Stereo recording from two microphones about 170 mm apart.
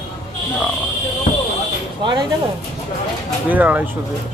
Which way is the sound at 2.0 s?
25° right (ahead or behind).